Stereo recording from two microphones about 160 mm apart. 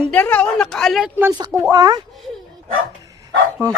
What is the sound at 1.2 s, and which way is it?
Speech, 25° right (ahead or behind).